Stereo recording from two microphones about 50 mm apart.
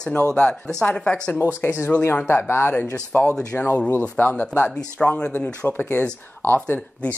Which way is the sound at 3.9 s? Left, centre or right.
Left.